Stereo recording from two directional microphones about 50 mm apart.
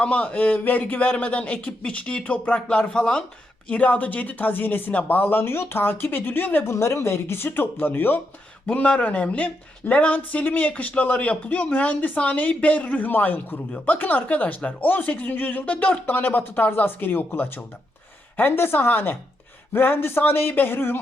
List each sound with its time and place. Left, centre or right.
0.0 s speech: left
3.7 s speech: left
6.7 s speech: left
8.6 s speech: left